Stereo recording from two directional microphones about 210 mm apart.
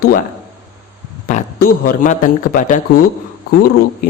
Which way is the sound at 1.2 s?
40° left (ahead or behind).